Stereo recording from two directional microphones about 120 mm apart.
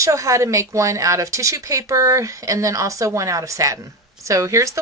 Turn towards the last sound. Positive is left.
turn(degrees=-25)  # may be behind; listen again after turning